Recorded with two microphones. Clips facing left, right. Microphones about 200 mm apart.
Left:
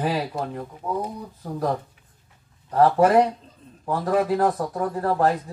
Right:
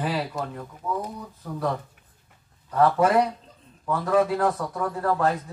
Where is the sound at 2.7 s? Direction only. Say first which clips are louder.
Left 3 dB; 35° left (ahead or behind).